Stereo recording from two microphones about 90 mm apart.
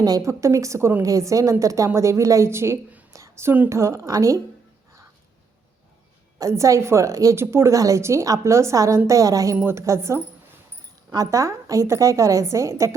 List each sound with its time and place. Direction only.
0.0 s a woman's voice: 40° right (ahead or behind); by 3.7 s 25° right (ahead or behind)
3.7 s a woman's voice: 35° right (ahead or behind)
6.4 s a woman's voice: 35° right (ahead or behind)